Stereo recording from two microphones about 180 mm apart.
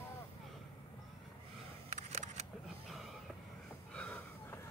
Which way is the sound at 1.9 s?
45° right (ahead or behind).